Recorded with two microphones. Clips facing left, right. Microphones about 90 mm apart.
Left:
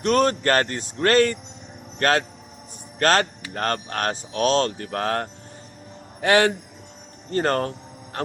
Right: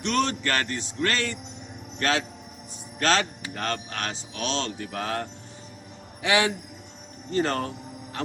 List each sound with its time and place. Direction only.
0.0 s speech: 45° left (ahead or behind)